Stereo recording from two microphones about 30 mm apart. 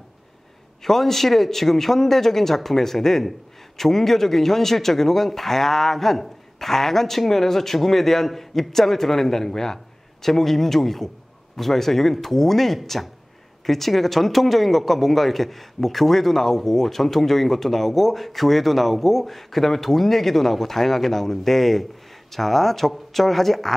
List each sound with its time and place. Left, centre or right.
0.8 s speech: centre